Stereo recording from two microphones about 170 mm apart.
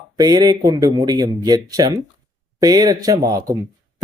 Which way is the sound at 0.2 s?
25° right (ahead or behind).